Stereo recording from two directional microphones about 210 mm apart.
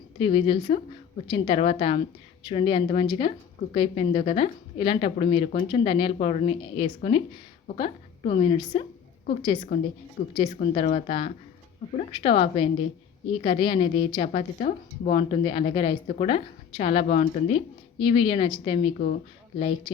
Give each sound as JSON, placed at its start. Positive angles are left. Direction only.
{"t": 0.2, "sound": "a woman's voice", "side_deg": 25}
{"t": 18.9, "sound": "speech", "side_deg": 40}